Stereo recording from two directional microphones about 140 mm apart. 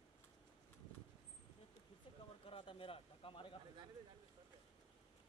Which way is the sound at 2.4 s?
40° left (ahead or behind).